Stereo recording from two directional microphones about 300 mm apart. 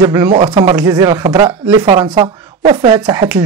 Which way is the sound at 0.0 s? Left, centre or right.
Centre.